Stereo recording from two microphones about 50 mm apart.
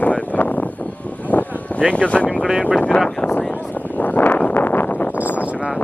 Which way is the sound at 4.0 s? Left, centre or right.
Left.